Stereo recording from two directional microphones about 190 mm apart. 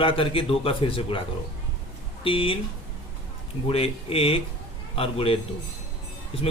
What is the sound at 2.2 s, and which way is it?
Speech, 30° left (ahead or behind).